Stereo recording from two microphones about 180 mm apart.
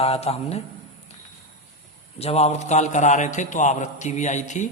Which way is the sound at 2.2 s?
35° left (ahead or behind).